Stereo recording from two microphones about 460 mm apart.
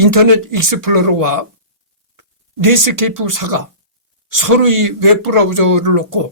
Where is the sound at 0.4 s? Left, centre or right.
Right.